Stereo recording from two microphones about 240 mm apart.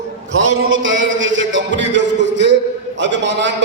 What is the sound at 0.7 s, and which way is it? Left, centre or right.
A man's voice, right.